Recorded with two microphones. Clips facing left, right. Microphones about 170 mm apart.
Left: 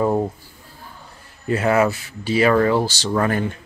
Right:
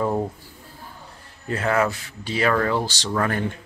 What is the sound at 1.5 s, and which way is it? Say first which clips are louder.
Speech: left 4 dB; 10° left (ahead or behind).